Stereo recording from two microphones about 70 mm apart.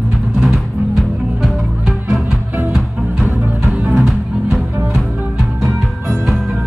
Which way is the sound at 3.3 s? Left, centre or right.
Right.